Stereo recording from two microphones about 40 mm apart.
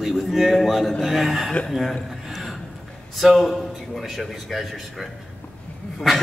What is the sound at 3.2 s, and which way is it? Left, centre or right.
Speech, centre.